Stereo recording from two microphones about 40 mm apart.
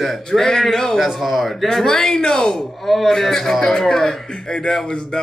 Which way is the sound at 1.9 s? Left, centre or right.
Centre.